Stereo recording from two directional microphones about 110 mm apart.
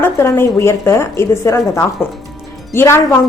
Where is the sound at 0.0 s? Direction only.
25° left (ahead or behind).